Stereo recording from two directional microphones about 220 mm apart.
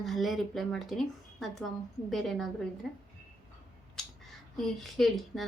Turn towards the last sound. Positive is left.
turn(degrees=0)  # may be behind; listen again after turning